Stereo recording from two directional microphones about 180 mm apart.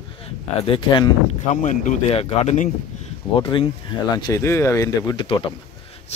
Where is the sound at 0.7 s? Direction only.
25° left (ahead or behind).